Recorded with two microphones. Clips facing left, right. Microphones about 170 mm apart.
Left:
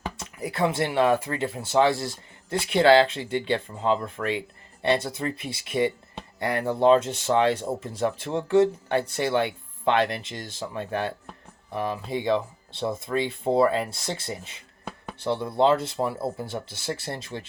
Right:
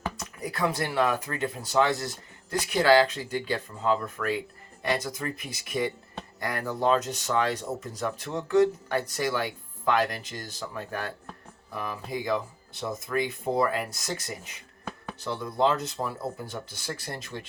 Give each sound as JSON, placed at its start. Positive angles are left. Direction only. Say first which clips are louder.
{"t": 0.2, "sound": "speech", "louder": "left 5 dB", "side_deg": 25}